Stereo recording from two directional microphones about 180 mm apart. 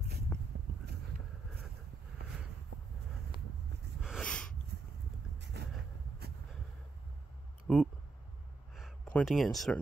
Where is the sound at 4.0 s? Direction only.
Centre (ahead or behind).